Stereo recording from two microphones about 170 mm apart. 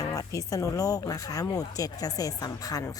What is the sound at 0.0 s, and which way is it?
Speech, 20° left (ahead or behind).